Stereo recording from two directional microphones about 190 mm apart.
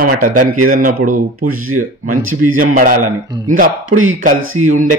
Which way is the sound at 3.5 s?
45° right (ahead or behind).